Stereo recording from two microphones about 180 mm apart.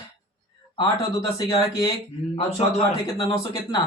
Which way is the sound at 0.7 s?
25° left (ahead or behind).